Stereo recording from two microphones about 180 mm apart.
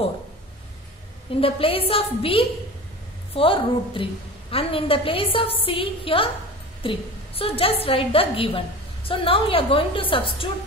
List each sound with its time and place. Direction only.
1.4 s a woman's voice: 30° left (ahead or behind)